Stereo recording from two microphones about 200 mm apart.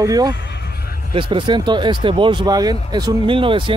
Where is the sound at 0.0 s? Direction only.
20° right (ahead or behind).